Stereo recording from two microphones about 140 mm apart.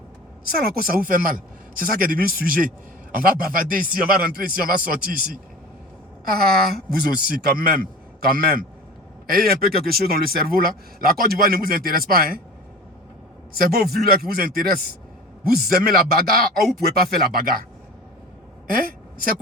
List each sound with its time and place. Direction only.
0.8 s speech: 90° right
13.5 s speech: 90° right
16.6 s speech: centre (ahead or behind)
17.3 s speech: 90° right
18.7 s a woman's voice: 90° right